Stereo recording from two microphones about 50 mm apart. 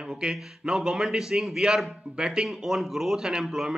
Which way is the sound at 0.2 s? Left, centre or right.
Centre.